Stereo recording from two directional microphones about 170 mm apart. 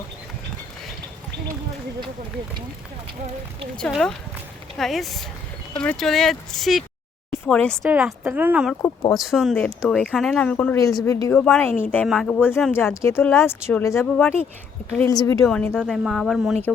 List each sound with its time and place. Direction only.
3.8 s speech: 5° left (ahead or behind)
7.9 s speech: 10° right (ahead or behind)
8.8 s speech: 20° left (ahead or behind)
9.1 s speech: centre (ahead or behind)
10.8 s speech: 20° left (ahead or behind)
11.3 s speech: 5° left (ahead or behind)
12.3 s speech: 10° left (ahead or behind)
15.0 s speech: 20° left (ahead or behind)
15.4 s speech: 5° left (ahead or behind)